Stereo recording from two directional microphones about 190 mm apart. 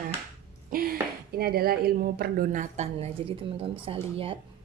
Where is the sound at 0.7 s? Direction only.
50° right (ahead or behind).